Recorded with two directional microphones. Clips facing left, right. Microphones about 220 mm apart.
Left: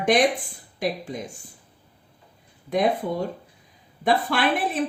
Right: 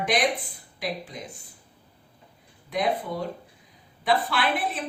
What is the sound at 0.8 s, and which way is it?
Speech, 45° left (ahead or behind).